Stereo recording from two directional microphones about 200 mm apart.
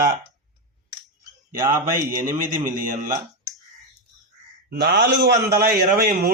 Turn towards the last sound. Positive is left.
turn(degrees=-50)  # may be behind; listen again after turning